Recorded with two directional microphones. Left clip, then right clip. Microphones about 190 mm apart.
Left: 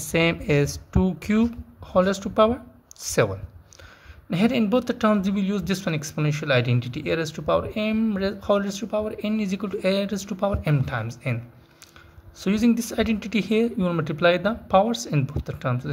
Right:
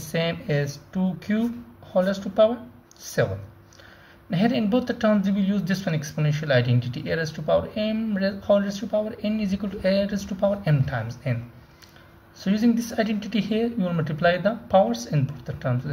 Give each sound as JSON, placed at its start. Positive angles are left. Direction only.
{"t": 0.1, "sound": "speech", "side_deg": 35}
{"t": 4.3, "sound": "speech", "side_deg": 35}
{"t": 12.4, "sound": "speech", "side_deg": 35}